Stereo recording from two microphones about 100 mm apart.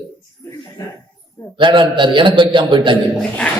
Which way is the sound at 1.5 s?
55° right (ahead or behind).